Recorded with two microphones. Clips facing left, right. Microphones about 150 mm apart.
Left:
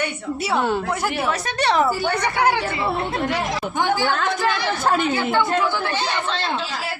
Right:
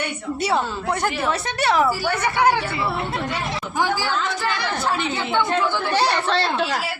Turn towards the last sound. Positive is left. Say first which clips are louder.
# left 4 dB
turn(degrees=45)  # may be behind; listen again after turning